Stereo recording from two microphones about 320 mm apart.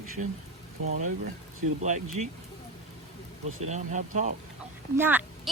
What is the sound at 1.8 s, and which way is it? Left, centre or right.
Speech, right.